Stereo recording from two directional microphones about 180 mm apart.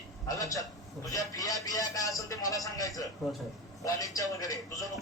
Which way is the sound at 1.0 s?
20° left (ahead or behind).